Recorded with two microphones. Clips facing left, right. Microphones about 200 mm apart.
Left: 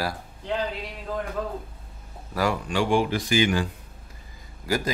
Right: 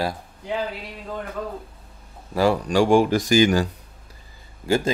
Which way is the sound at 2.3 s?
30° right (ahead or behind).